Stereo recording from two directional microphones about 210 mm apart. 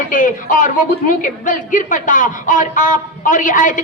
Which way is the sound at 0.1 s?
40° left (ahead or behind).